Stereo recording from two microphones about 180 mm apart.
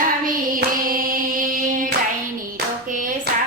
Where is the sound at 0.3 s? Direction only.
50° right (ahead or behind).